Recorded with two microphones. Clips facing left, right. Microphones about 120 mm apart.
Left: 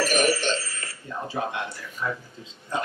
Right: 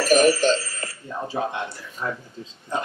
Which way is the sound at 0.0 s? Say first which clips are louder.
Right 6 dB; 40° right (ahead or behind).